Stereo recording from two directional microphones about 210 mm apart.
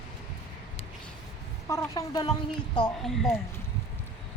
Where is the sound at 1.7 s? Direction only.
15° left (ahead or behind).